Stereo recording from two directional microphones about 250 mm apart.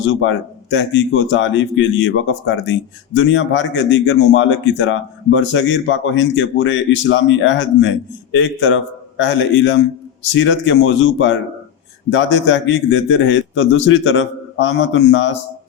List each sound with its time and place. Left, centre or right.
0.0 s a man's voice: left